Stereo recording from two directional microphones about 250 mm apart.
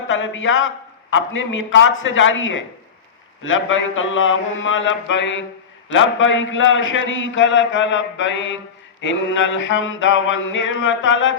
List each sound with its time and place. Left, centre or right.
0.1 s a man's voice: left